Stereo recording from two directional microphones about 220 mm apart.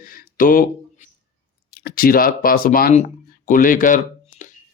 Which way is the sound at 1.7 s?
45° left (ahead or behind).